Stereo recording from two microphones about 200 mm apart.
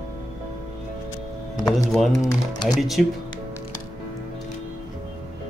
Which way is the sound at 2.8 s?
Centre (ahead or behind).